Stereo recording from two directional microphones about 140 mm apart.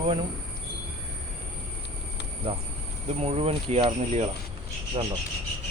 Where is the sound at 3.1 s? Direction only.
45° right (ahead or behind).